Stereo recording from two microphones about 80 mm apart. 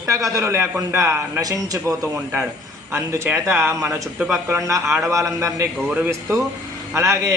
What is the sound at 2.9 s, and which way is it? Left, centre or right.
A man's voice, right.